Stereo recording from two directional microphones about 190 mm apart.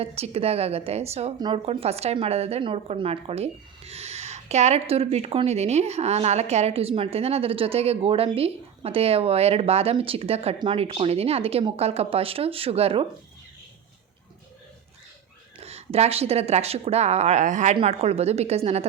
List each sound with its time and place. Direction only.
0.0 s speech: 30° right (ahead or behind)
15.6 s speech: 35° right (ahead or behind)